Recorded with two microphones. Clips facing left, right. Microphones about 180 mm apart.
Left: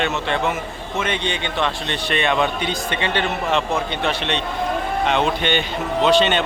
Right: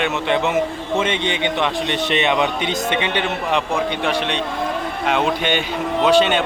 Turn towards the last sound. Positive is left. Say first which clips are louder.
# right 1 dB
turn(degrees=-10)  # may be behind; listen again after turning